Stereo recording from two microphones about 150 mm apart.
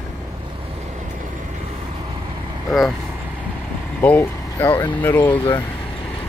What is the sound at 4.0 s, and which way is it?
Speech, 15° left (ahead or behind).